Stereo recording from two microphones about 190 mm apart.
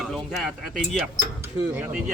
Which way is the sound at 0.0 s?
Centre (ahead or behind).